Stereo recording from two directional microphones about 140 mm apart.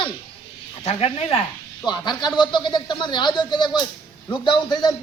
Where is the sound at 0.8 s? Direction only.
50° left (ahead or behind).